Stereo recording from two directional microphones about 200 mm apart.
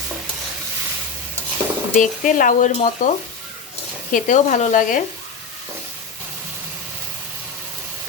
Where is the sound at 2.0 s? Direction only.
40° left (ahead or behind).